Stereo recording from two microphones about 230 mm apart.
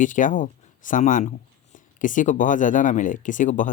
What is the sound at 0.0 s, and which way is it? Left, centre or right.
Speech, left.